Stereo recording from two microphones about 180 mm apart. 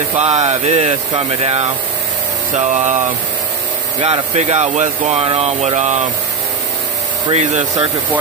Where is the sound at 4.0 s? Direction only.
35° right (ahead or behind).